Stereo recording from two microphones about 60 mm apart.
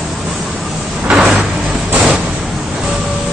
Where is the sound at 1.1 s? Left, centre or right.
Centre.